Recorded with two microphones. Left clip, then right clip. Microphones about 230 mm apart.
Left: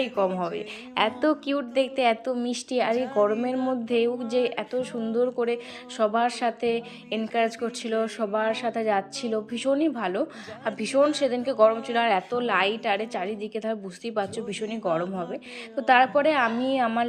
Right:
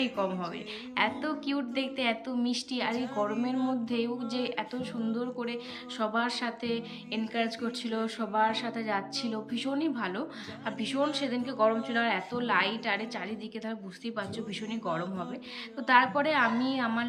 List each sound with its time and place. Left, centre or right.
0.0 s a woman's voice: left